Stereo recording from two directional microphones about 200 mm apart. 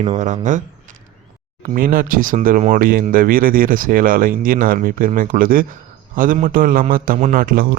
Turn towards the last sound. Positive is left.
turn(degrees=-45)  # may be behind; listen again after turning